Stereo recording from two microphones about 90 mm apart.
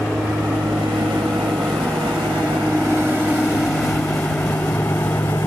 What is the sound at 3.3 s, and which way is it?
Vehicle, 15° left (ahead or behind).